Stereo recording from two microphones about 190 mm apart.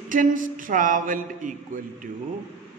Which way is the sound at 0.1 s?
45° right (ahead or behind).